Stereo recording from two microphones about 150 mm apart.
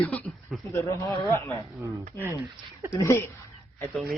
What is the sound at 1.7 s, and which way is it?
Speech, 20° right (ahead or behind).